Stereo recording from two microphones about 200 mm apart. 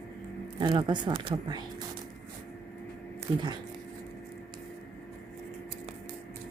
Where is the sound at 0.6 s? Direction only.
20° right (ahead or behind).